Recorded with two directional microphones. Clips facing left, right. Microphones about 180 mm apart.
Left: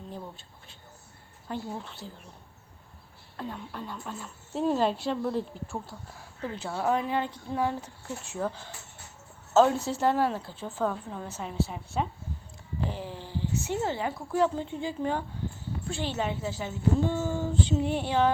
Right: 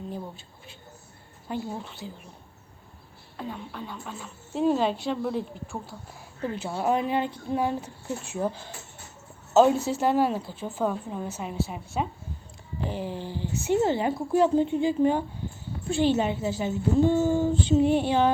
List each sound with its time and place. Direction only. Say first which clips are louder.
1.5 s speech: right 3 dB; 5° right (ahead or behind)
3.3 s speech: right 1 dB; centre (ahead or behind)
6.5 s a woman's voice: right 2 dB; 15° right (ahead or behind)